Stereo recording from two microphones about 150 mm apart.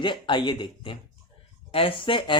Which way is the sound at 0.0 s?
30° left (ahead or behind).